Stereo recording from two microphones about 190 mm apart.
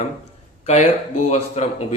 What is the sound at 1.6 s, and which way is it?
Speech, 35° left (ahead or behind).